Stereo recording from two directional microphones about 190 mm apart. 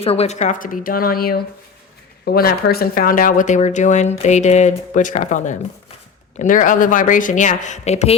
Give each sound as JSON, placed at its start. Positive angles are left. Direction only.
{"t": 0.0, "sound": "a woman's voice", "side_deg": 30}